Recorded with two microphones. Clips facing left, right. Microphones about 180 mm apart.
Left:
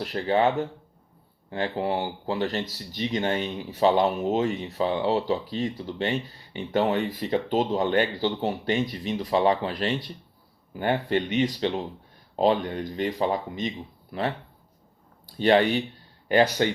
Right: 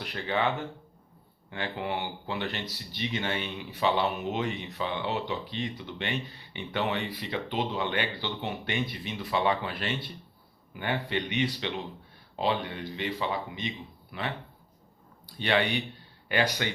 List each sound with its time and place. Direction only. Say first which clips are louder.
0.0 s speech: left 7 dB; 35° left (ahead or behind)
15.4 s speech: left 7 dB; 40° left (ahead or behind)